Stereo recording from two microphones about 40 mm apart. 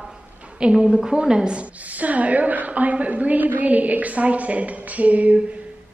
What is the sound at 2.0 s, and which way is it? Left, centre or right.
A woman's voice, right.